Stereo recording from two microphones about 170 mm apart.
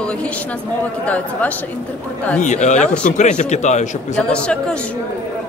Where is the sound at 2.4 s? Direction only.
45° left (ahead or behind).